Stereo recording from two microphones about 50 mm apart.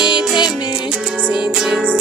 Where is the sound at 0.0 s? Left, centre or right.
Centre.